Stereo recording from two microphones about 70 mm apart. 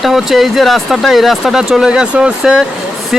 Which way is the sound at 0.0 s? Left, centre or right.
Centre.